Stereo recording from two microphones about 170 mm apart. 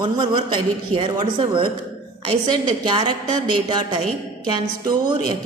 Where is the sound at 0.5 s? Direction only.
30° right (ahead or behind).